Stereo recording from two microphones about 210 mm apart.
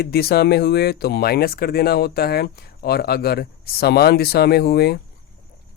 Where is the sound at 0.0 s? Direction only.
45° left (ahead or behind).